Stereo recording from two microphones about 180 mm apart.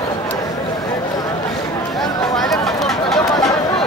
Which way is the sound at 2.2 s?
Centre (ahead or behind).